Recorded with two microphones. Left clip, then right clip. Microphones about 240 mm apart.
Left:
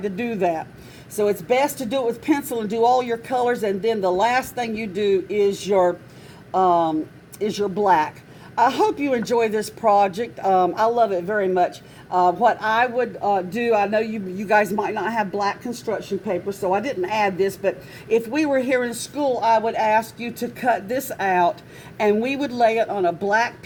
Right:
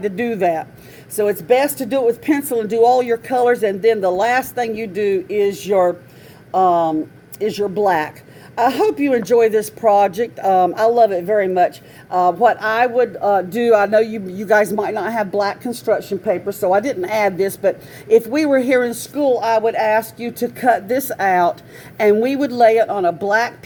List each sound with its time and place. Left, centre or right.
0.0 s a man's voice: right